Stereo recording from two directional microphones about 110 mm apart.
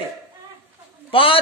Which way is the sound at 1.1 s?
55° left (ahead or behind).